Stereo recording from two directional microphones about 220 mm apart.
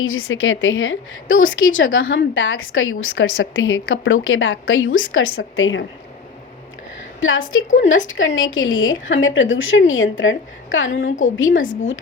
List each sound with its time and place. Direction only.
0.0 s a woman's voice: 65° left (ahead or behind)
7.2 s a woman's voice: 60° left (ahead or behind)